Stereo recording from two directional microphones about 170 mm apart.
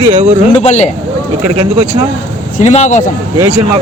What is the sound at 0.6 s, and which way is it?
Speech, 45° left (ahead or behind).